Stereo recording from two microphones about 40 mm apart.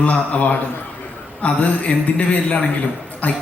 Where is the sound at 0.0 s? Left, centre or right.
Left.